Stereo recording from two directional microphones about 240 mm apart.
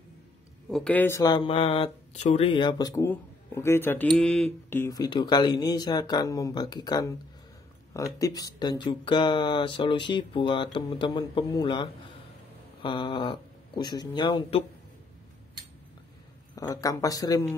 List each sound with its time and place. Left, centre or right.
0.7 s speech: centre
16.5 s speech: centre